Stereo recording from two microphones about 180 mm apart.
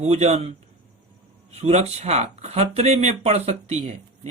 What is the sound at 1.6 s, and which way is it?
Speech, 35° right (ahead or behind).